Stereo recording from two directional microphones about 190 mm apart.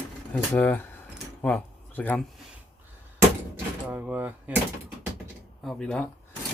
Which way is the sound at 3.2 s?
10° right (ahead or behind).